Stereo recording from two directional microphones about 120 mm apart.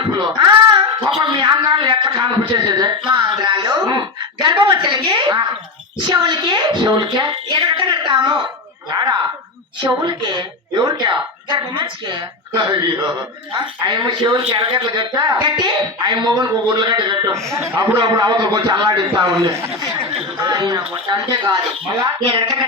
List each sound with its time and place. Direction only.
0.0 s a sound: 40° right (ahead or behind)
1.4 s speech: 35° right (ahead or behind)
9.8 s speech: 35° right (ahead or behind)
13.8 s speech: 35° right (ahead or behind)
17.5 s speech: 25° right (ahead or behind)
17.9 s speech: 35° right (ahead or behind)